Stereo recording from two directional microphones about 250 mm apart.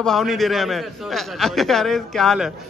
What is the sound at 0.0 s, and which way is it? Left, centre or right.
A man's voice, centre.